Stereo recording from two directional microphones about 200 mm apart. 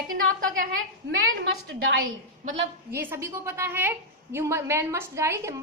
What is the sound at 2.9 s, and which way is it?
A woman's voice, 10° right (ahead or behind).